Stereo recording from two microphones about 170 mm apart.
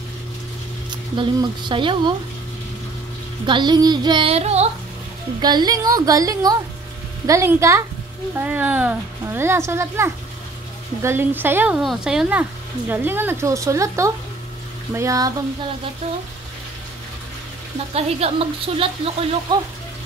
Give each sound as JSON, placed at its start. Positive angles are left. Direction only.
{"t": 0.8, "sound": "speech", "side_deg": -25}
{"t": 3.4, "sound": "child singing", "side_deg": -25}
{"t": 5.4, "sound": "child singing", "side_deg": -25}
{"t": 7.2, "sound": "speech", "side_deg": -15}
{"t": 15.0, "sound": "child singing", "side_deg": -20}
{"t": 17.9, "sound": "a woman's voice", "side_deg": -35}
{"t": 19.5, "sound": "child singing", "side_deg": -25}